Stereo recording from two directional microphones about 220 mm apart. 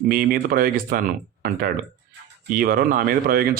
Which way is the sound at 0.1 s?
40° right (ahead or behind).